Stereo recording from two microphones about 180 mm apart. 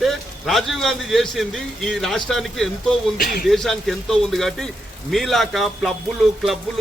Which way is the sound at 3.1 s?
55° left (ahead or behind).